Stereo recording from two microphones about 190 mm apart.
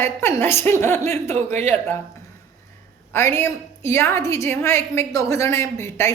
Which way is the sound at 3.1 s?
15° left (ahead or behind).